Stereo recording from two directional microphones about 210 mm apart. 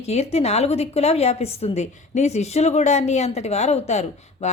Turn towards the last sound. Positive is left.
turn(degrees=30)  # may be behind; listen again after turning